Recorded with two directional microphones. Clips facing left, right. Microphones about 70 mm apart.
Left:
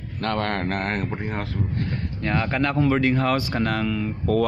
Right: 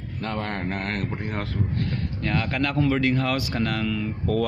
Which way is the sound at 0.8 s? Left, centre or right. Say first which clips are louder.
Left 3 dB; left.